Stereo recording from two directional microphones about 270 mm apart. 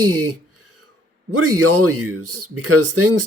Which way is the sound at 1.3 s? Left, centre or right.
Right.